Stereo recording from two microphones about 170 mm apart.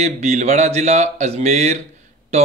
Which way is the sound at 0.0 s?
40° right (ahead or behind).